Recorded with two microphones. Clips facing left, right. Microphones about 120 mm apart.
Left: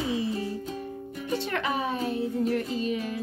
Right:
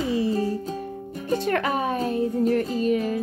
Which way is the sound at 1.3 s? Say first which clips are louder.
Right 6 dB; 45° right (ahead or behind).